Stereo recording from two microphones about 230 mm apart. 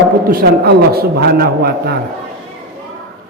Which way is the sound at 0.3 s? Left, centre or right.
Right.